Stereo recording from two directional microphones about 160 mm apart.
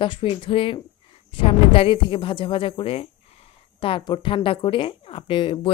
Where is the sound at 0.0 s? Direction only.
35° left (ahead or behind).